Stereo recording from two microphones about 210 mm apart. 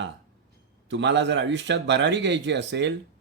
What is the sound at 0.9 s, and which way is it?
A man's voice, 55° right (ahead or behind).